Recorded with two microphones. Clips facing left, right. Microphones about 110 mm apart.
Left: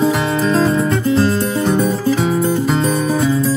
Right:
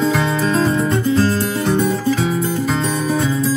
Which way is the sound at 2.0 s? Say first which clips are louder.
Left 2 dB; 25° left (ahead or behind).